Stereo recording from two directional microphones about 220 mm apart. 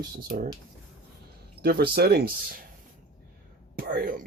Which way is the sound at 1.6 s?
45° right (ahead or behind).